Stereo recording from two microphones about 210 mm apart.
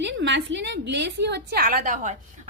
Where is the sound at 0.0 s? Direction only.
60° right (ahead or behind).